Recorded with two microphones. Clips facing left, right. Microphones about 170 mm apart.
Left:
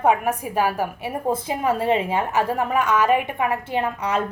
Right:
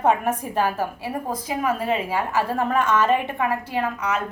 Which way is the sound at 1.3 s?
30° left (ahead or behind).